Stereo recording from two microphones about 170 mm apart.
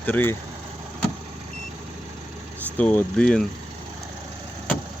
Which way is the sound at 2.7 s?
10° left (ahead or behind).